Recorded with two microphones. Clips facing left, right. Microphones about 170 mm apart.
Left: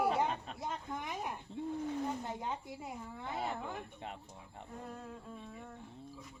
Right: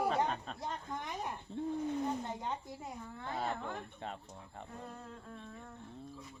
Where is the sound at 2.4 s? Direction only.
10° left (ahead or behind).